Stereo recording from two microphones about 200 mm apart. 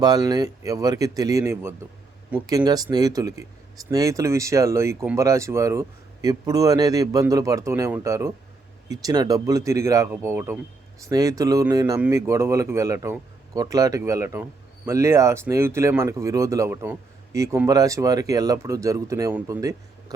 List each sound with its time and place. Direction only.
0.0 s speech: 20° right (ahead or behind)